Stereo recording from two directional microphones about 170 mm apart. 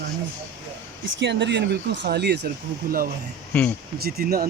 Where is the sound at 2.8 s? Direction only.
55° right (ahead or behind).